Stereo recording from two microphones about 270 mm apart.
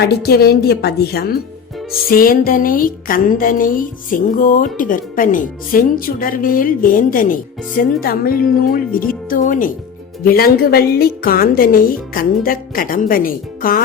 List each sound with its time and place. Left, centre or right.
0.0 s speech: left